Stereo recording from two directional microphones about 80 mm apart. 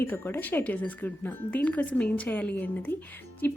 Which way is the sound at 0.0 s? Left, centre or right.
Left.